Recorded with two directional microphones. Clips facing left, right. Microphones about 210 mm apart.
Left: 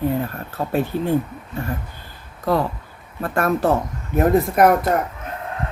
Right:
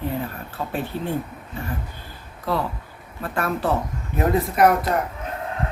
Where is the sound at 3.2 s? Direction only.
45° left (ahead or behind).